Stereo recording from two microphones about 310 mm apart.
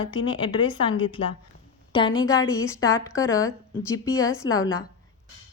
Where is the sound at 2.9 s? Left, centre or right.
Centre.